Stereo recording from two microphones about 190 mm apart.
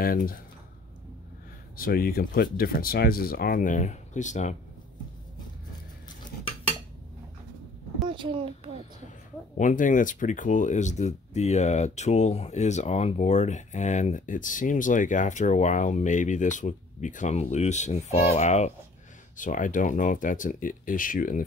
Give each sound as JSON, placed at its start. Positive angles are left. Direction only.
{"t": 0.0, "sound": "speech", "side_deg": 50}
{"t": 1.8, "sound": "speech", "side_deg": 50}
{"t": 8.1, "sound": "a sound", "side_deg": -25}
{"t": 9.6, "sound": "speech", "side_deg": 40}